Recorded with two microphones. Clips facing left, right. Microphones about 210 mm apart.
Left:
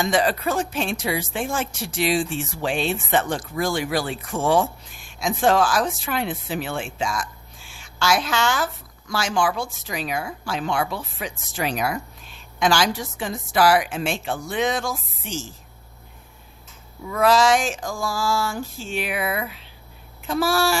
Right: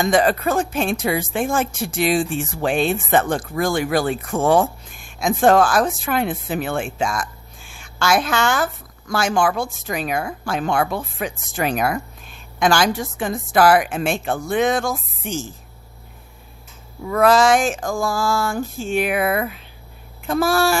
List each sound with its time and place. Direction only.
0.0 s speech: 50° right (ahead or behind)
17.1 s speech: 55° right (ahead or behind)